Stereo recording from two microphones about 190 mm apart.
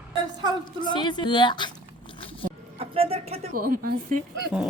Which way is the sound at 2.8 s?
30° right (ahead or behind).